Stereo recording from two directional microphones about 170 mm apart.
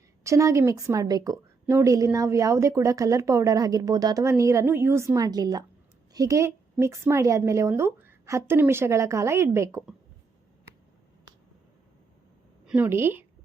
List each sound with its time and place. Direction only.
0.3 s a woman's voice: 15° right (ahead or behind)
12.6 s a woman's voice: 10° right (ahead or behind)